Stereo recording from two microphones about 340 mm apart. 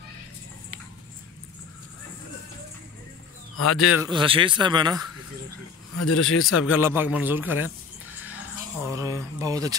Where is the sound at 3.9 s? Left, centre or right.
Centre.